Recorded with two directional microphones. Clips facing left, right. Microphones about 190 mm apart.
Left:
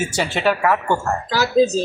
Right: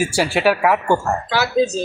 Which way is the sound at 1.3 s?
40° left (ahead or behind).